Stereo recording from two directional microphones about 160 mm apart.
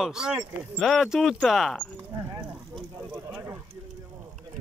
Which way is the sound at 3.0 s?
15° right (ahead or behind).